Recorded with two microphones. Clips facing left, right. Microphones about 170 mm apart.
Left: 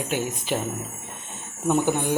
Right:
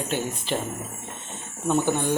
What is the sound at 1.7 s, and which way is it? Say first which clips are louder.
Speech: left 1 dB; 15° left (ahead or behind).